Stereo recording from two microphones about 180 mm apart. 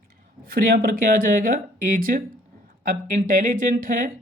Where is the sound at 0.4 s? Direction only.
55° right (ahead or behind).